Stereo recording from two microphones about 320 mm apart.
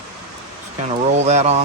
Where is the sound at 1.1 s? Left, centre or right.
Right.